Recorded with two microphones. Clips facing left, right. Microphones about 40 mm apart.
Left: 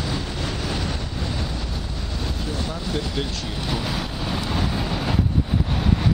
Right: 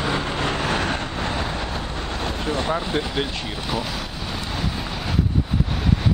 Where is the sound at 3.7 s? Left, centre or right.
Centre.